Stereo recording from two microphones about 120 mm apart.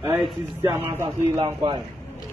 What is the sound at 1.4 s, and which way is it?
Speech, 40° right (ahead or behind).